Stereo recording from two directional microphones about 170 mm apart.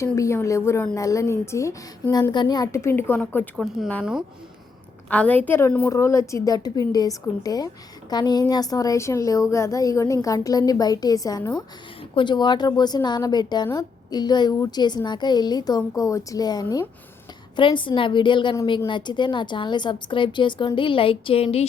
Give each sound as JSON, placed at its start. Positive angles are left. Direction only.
{"t": 0.0, "sound": "a woman's voice", "side_deg": 15}
{"t": 5.0, "sound": "a woman's voice", "side_deg": 10}